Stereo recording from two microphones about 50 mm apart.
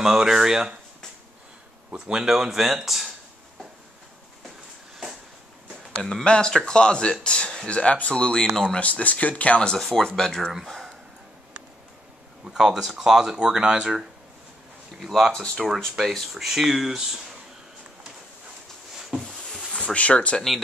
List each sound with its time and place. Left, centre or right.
0.0 s speech: centre
2.0 s speech: centre
6.0 s speech: centre
9.8 s speech: centre
12.4 s speech: centre
15.0 s speech: centre
15.3 s speech: centre
15.6 s speech: centre
19.2 s a sound: centre
19.7 s speech: left